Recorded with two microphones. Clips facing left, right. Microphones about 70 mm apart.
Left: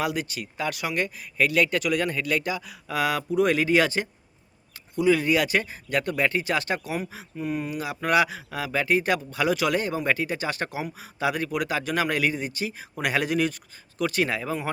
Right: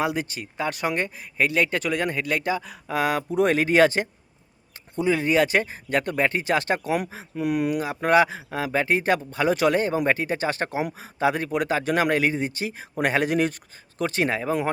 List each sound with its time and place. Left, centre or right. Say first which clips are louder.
0.0 s speech: right 2 dB; right
3.2 s a man's voice: right 1 dB; right
7.3 s speech: right 6 dB; right
7.8 s a man's voice: right 2 dB; right